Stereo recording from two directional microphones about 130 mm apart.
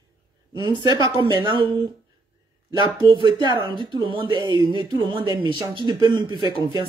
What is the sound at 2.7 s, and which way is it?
Speech, 35° right (ahead or behind).